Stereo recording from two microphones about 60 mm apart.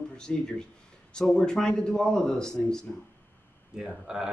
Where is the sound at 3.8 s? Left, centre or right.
Centre.